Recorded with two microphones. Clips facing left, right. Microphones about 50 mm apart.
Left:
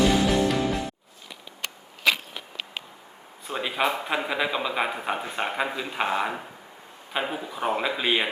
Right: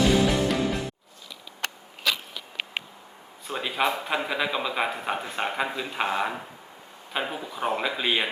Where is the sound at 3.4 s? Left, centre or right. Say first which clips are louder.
Even; centre.